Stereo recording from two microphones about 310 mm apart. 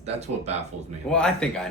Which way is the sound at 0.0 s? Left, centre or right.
Centre.